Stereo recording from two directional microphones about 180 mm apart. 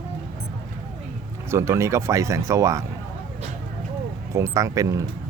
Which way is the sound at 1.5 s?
15° right (ahead or behind).